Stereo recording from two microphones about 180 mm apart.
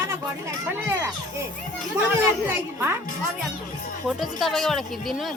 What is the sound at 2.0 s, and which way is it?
Speech, 15° right (ahead or behind).